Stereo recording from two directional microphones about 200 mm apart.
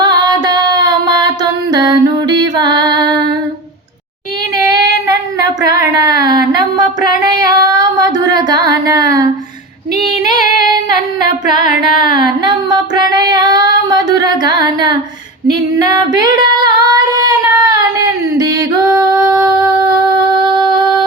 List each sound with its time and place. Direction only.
0.0 s music: 20° right (ahead or behind)
4.5 s child singing: 20° right (ahead or behind)
7.2 s singing: 20° right (ahead or behind)
10.0 s female singing: 20° right (ahead or behind)
12.1 s child singing: 20° right (ahead or behind)
15.4 s female singing: 20° right (ahead or behind)
19.2 s singing: 15° right (ahead or behind)
20.3 s a sound: 20° right (ahead or behind)